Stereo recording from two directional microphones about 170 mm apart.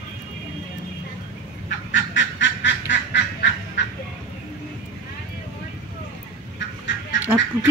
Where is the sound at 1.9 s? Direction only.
90° left.